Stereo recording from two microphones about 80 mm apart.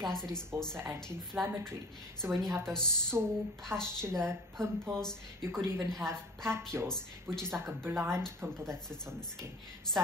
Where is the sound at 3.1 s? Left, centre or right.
Right.